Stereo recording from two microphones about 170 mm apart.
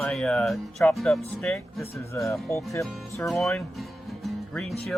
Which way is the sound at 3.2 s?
Centre (ahead or behind).